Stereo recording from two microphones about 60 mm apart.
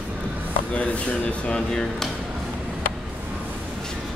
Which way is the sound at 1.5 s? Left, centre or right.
Centre.